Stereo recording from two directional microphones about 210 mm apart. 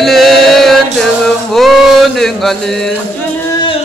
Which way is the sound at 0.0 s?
Centre (ahead or behind).